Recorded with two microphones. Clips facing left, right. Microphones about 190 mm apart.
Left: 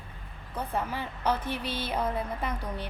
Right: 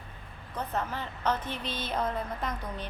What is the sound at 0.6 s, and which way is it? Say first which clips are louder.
A woman's voice: left 1 dB; 10° left (ahead or behind).